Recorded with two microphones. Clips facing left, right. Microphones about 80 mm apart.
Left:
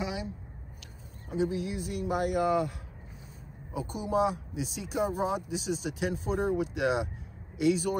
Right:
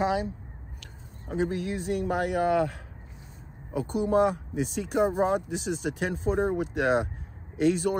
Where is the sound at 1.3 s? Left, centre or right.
Right.